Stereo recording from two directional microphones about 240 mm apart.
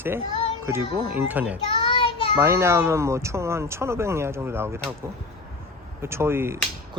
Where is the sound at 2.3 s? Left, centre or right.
Centre.